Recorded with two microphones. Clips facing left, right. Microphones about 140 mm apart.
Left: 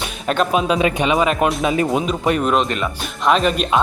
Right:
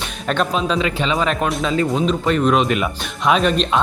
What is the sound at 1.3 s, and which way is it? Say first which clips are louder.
Speech: left 2 dB; 5° left (ahead or behind).